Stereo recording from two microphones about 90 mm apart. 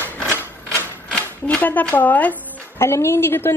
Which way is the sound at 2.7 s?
30° left (ahead or behind).